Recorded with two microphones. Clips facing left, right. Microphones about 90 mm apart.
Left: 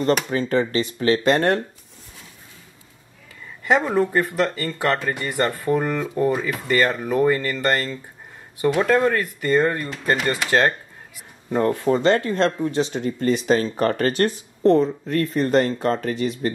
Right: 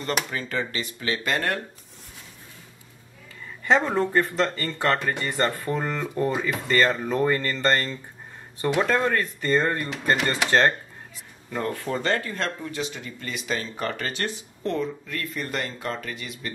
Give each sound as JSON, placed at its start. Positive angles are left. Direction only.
{"t": 0.3, "sound": "speech", "side_deg": 35}
{"t": 3.6, "sound": "speech", "side_deg": 10}
{"t": 11.5, "sound": "speech", "side_deg": 25}